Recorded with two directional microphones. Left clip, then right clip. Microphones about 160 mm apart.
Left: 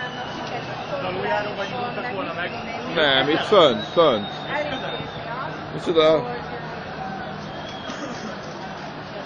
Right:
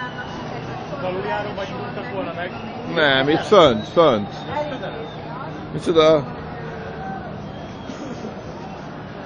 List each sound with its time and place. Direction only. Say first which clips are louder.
3.0 s a man's voice: right 2 dB; 10° right (ahead or behind)
5.9 s speech: right 3 dB; 20° right (ahead or behind)